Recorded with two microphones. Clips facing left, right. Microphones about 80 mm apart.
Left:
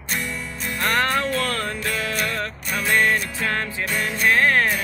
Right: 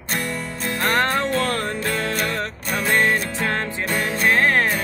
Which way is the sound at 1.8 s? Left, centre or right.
Right.